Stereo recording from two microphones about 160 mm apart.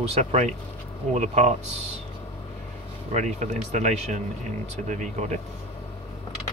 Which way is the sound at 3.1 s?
45° right (ahead or behind).